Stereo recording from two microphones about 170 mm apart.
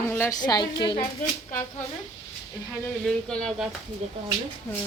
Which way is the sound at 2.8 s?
5° left (ahead or behind).